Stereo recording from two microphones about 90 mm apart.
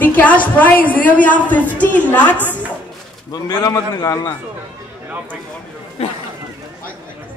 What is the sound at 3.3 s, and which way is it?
A man's voice, 45° left (ahead or behind).